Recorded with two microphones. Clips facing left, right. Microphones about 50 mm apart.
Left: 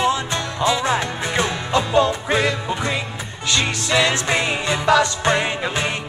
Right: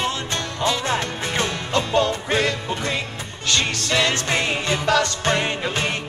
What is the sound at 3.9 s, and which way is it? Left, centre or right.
Music, centre.